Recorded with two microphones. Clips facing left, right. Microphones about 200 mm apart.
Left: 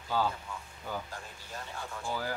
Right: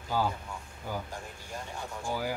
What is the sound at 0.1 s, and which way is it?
Speech, 10° right (ahead or behind).